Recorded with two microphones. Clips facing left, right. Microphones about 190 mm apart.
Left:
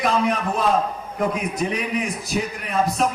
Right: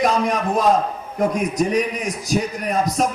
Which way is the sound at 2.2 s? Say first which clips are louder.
Right 4 dB; 40° right (ahead or behind).